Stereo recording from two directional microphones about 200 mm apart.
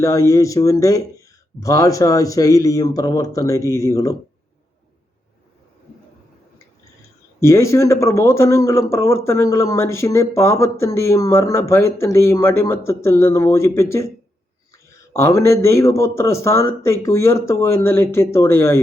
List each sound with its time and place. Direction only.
0.0 s speech: 15° left (ahead or behind)
7.3 s speech: 15° left (ahead or behind)
15.1 s speech: 15° left (ahead or behind)